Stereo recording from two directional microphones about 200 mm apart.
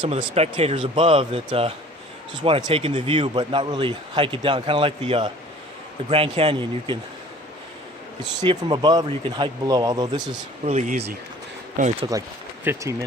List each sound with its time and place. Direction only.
0.0 s speech: 30° right (ahead or behind)
8.4 s speech: 20° right (ahead or behind)
10.7 s speech: 35° right (ahead or behind)
12.6 s speech: 15° right (ahead or behind)